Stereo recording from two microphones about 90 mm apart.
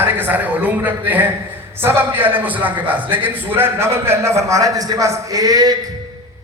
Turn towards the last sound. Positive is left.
turn(degrees=-45)  # may be behind; listen again after turning